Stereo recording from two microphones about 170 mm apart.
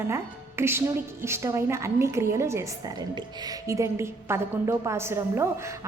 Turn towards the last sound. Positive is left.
turn(degrees=-15)  # may be behind; listen again after turning